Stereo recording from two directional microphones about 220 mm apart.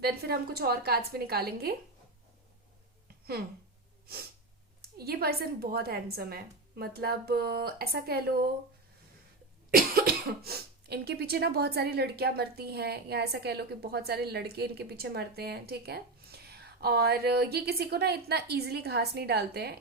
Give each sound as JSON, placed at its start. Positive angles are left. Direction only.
{"t": 0.0, "sound": "speech", "side_deg": -45}
{"t": 3.1, "sound": "a sound", "side_deg": -45}
{"t": 4.1, "sound": "speech", "side_deg": -45}
{"t": 9.7, "sound": "speech", "side_deg": -40}